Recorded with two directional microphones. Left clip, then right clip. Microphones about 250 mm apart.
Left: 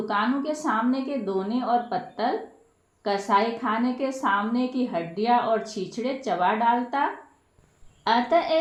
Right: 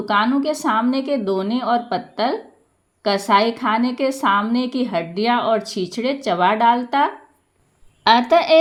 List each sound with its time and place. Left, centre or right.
0.0 s a woman's voice: right